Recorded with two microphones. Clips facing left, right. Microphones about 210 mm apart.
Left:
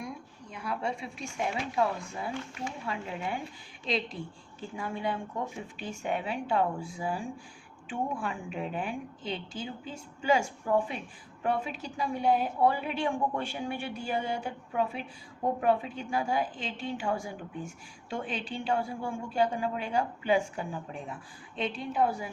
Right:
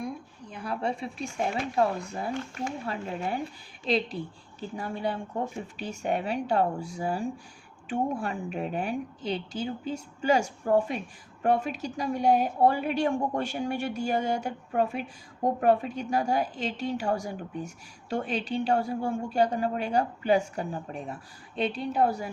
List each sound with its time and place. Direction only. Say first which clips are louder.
0.5 s a woman's voice: right 3 dB; 35° right (ahead or behind)